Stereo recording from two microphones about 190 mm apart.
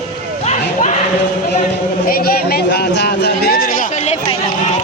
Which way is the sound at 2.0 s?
50° left (ahead or behind).